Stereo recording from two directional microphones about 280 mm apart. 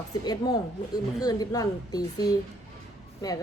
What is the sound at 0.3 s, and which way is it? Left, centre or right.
Speech, centre.